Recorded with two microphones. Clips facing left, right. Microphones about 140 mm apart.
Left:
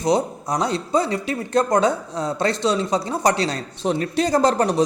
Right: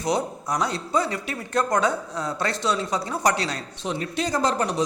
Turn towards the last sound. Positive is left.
turn(degrees=40)  # may be behind; listen again after turning